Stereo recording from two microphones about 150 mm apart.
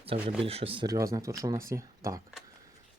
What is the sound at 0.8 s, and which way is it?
Speech, 25° right (ahead or behind).